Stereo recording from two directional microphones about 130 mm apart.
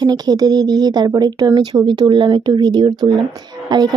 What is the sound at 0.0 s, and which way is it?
Speech, 30° right (ahead or behind).